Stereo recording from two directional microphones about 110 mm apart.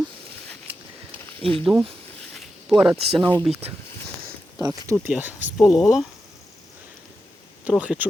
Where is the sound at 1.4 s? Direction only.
60° right (ahead or behind).